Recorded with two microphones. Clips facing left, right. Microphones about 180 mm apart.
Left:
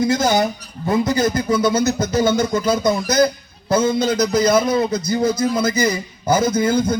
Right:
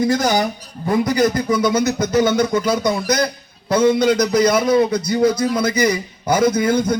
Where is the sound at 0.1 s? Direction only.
25° left (ahead or behind).